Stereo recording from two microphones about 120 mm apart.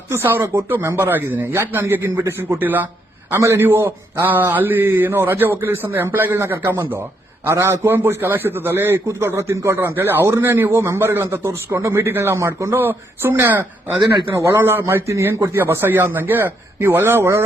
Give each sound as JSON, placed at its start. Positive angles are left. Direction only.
{"t": 0.1, "sound": "a man's voice", "side_deg": -20}
{"t": 14.0, "sound": "speech", "side_deg": -40}
{"t": 14.3, "sound": "a man's voice", "side_deg": -20}